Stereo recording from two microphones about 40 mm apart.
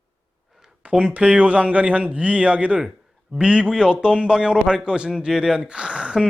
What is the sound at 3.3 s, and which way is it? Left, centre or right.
A man's voice, right.